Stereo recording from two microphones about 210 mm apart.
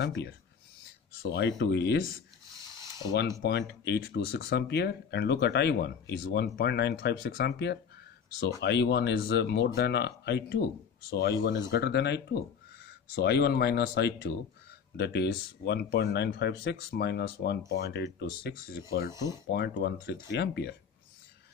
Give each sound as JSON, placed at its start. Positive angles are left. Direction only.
{"t": 0.0, "sound": "speech", "side_deg": 55}
{"t": 3.4, "sound": "speech", "side_deg": 55}
{"t": 19.0, "sound": "speech", "side_deg": -15}
{"t": 19.5, "sound": "speech", "side_deg": 50}